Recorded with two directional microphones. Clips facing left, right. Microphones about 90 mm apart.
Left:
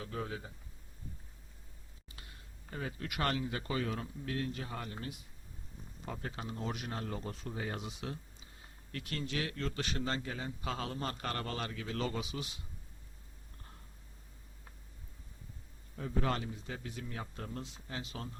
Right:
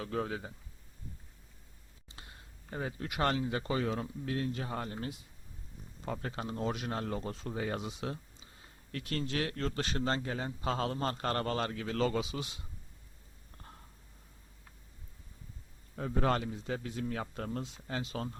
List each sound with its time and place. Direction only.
0.0 s speech: 50° right (ahead or behind)
2.1 s a sound: 25° right (ahead or behind)
2.6 s speech: 30° right (ahead or behind)
6.1 s a man's voice: 45° right (ahead or behind)
7.8 s a man's voice: 30° right (ahead or behind)
12.2 s speech: 25° right (ahead or behind)
16.0 s speech: 45° right (ahead or behind)
16.8 s a man's voice: 40° right (ahead or behind)
17.1 s speech: 60° right (ahead or behind)
17.5 s speech: 45° right (ahead or behind)